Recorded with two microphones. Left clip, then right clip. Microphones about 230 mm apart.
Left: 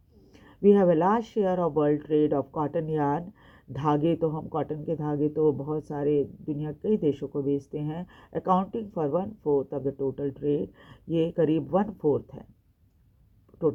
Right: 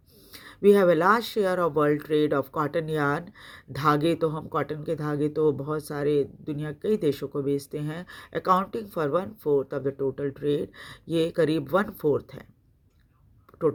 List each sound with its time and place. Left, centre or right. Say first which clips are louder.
0.4 s speech: right 2 dB; right